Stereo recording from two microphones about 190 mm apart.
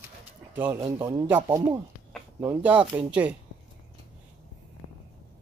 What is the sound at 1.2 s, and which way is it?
Speech, 10° right (ahead or behind).